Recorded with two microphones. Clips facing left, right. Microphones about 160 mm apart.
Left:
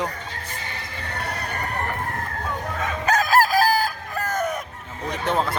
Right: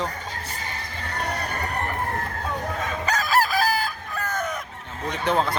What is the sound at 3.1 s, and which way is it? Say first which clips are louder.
Chicken: left 4 dB; 50° left (ahead or behind).